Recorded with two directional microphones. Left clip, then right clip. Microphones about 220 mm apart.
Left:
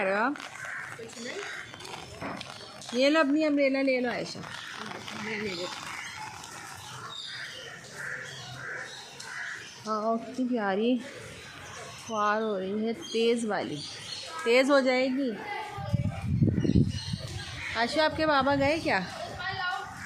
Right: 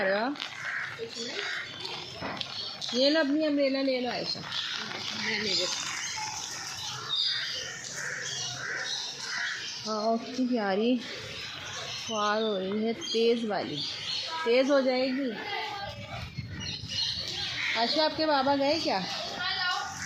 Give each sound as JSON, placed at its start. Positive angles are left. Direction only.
{"t": 0.0, "sound": "a sound", "side_deg": 5}
{"t": 3.0, "sound": "a woman's voice", "side_deg": 10}
{"t": 9.9, "sound": "speech", "side_deg": -5}
{"t": 12.1, "sound": "a woman's voice", "side_deg": 0}
{"t": 17.7, "sound": "a woman's voice", "side_deg": 5}